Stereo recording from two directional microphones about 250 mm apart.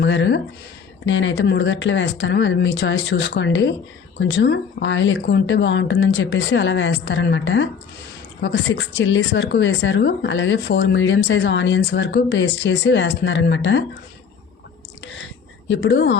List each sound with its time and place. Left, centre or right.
0.0 s speech: left
15.0 s a sound: left
15.7 s speech: left